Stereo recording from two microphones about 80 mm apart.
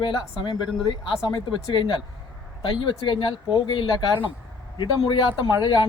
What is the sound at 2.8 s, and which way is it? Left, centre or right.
Speech, left.